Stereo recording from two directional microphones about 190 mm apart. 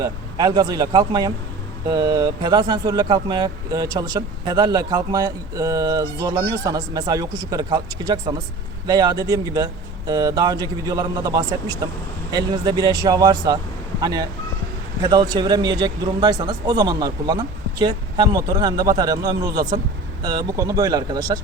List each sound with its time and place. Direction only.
0.0 s speech: 20° right (ahead or behind)